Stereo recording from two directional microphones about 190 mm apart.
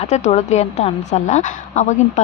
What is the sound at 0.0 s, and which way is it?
Speech, 35° left (ahead or behind).